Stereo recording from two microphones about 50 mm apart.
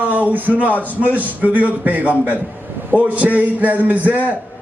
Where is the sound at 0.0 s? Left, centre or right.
Right.